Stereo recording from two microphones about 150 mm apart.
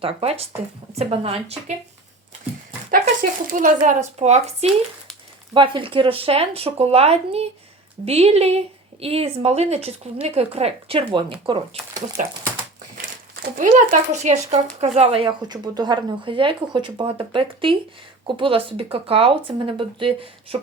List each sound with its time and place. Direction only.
0.0 s a woman's voice: 40° right (ahead or behind)
2.9 s speech: 65° right (ahead or behind)
5.5 s a woman's voice: 35° right (ahead or behind)
13.7 s a woman's voice: 55° right (ahead or behind); by 20.6 s 35° right (ahead or behind)